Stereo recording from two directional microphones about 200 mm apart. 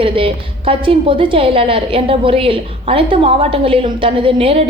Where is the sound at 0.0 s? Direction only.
25° right (ahead or behind).